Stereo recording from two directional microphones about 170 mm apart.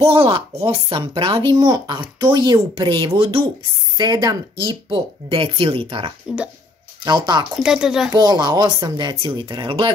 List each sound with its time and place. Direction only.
0.0 s speech: 30° right (ahead or behind)
7.6 s speech: 5° right (ahead or behind)
8.1 s speech: 25° right (ahead or behind)